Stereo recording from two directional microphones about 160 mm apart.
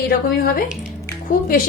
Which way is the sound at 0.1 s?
65° left (ahead or behind).